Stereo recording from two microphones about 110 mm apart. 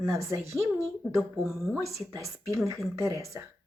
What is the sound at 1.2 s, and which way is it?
Speech, centre (ahead or behind).